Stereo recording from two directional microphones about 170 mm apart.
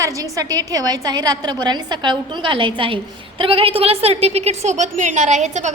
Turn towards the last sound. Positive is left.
turn(degrees=-45)  # may be behind; listen again after turning